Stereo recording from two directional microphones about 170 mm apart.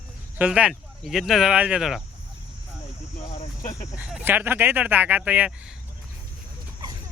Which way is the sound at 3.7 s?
20° left (ahead or behind).